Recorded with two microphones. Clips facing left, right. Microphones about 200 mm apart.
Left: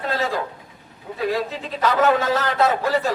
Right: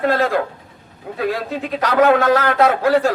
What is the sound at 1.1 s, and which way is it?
A man's voice, 65° right (ahead or behind).